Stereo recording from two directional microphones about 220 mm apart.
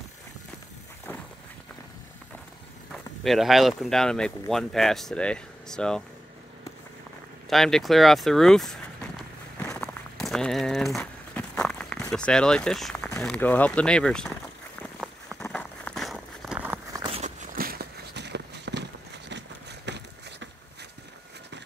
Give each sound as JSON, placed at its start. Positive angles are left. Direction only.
{"t": 2.9, "sound": "speech", "side_deg": 0}
{"t": 7.4, "sound": "speech", "side_deg": 0}
{"t": 9.6, "sound": "walk", "side_deg": 5}
{"t": 13.1, "sound": "speech", "side_deg": 5}
{"t": 15.0, "sound": "a sound", "side_deg": 0}
{"t": 17.0, "sound": "a sound", "side_deg": -30}